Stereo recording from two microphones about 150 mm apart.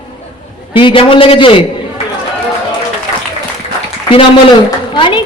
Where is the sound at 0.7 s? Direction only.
35° left (ahead or behind).